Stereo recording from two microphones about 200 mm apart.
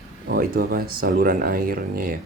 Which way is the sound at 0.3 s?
50° right (ahead or behind).